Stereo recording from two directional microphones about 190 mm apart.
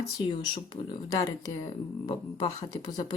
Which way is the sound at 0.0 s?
25° left (ahead or behind).